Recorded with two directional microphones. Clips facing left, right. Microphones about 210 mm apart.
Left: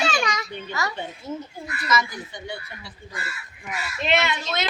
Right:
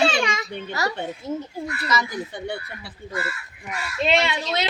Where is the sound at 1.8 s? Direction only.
35° right (ahead or behind).